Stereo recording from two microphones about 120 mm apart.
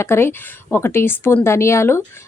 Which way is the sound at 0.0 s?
20° left (ahead or behind).